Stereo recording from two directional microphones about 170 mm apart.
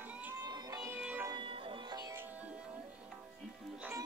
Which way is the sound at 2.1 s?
10° right (ahead or behind).